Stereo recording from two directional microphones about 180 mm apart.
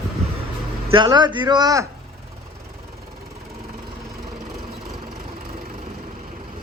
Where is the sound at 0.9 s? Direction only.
25° right (ahead or behind).